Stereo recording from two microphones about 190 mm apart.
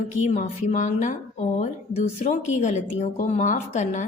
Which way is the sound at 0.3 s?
40° left (ahead or behind).